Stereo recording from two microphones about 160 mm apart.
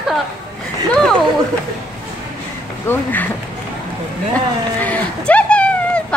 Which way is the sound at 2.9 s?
10° left (ahead or behind).